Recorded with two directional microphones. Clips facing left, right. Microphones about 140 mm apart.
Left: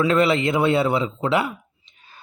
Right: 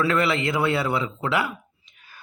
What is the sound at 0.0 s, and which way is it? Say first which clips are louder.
Speech: left 4 dB; 20° left (ahead or behind).